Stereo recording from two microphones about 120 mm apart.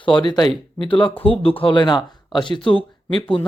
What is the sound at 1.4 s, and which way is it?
Speech, 50° left (ahead or behind).